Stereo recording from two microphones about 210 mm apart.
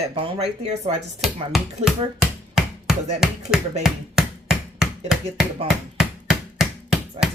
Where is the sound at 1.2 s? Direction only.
Centre (ahead or behind).